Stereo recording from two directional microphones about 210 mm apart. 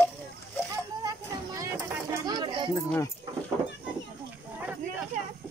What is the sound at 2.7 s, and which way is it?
Speech, 15° left (ahead or behind).